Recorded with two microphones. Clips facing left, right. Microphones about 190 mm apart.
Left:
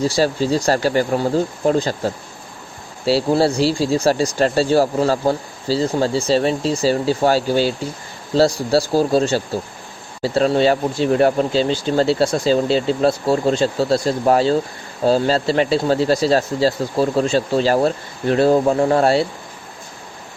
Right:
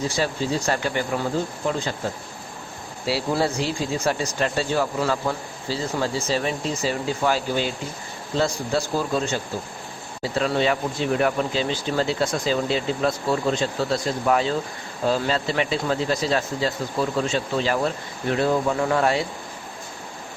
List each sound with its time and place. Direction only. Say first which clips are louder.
0.0 s speech: left 7 dB; 35° left (ahead or behind)